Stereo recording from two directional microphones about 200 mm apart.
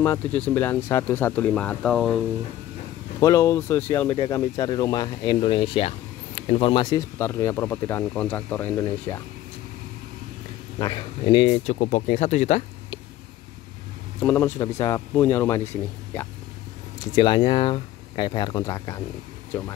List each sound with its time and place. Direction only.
0.0 s speech: 10° left (ahead or behind)
3.2 s speech: 15° left (ahead or behind)
7.2 s speech: 15° left (ahead or behind)
10.8 s speech: 25° left (ahead or behind)
14.2 s speech: 10° left (ahead or behind)
17.1 s speech: 25° left (ahead or behind)